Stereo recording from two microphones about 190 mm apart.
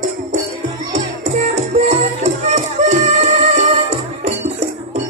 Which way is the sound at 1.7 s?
35° right (ahead or behind).